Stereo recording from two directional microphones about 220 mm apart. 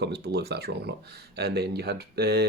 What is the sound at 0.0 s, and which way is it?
Speech, 50° right (ahead or behind).